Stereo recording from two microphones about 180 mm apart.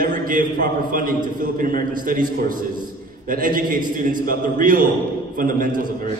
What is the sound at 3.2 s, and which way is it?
A man's voice, 50° right (ahead or behind).